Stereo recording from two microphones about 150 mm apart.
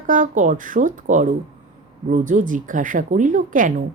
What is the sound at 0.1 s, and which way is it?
Speech, 60° right (ahead or behind).